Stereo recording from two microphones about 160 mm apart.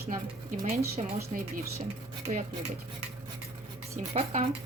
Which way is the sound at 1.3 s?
45° right (ahead or behind).